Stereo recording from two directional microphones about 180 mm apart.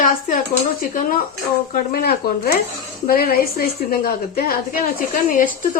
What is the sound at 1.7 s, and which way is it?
A woman's voice, 55° left (ahead or behind).